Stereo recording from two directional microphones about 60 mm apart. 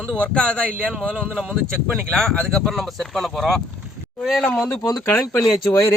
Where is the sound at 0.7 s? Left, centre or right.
Right.